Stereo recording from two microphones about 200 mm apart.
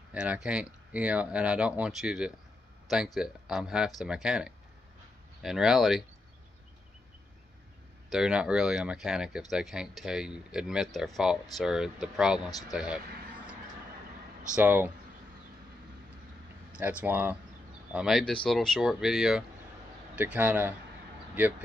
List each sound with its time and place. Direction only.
0.1 s speech: 5° right (ahead or behind)
8.1 s speech: 5° right (ahead or behind)
12.4 s speech: 20° left (ahead or behind)
12.7 s speech: 5° right (ahead or behind)
14.5 s speech: 10° right (ahead or behind)
17.0 s speech: 10° right (ahead or behind)